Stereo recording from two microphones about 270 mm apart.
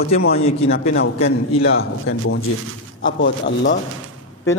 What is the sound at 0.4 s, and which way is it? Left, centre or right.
Speech, left.